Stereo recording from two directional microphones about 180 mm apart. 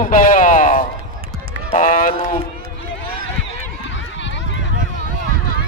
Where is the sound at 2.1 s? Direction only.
30° left (ahead or behind).